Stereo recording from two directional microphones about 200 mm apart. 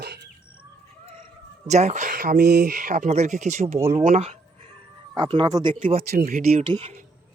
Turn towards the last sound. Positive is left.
turn(degrees=-30)  # may be behind; listen again after turning